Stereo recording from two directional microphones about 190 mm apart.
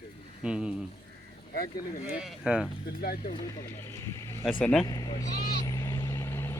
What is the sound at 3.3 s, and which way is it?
Speech, 15° left (ahead or behind).